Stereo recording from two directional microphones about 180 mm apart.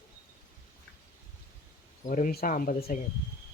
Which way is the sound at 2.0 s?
50° left (ahead or behind).